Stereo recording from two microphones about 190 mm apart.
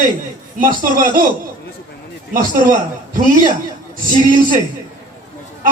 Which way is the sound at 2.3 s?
45° right (ahead or behind).